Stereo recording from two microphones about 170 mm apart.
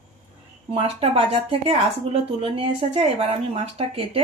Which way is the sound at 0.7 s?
35° right (ahead or behind).